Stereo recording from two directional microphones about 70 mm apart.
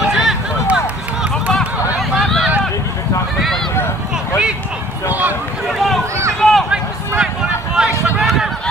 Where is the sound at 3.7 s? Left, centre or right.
Left.